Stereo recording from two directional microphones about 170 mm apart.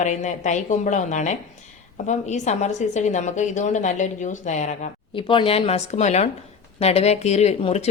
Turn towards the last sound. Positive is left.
turn(degrees=40)  # may be behind; listen again after turning